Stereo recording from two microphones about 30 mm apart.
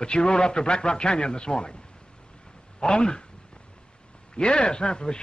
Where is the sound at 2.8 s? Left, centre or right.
Left.